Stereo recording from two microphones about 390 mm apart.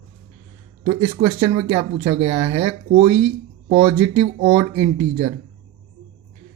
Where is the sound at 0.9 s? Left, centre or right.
Centre.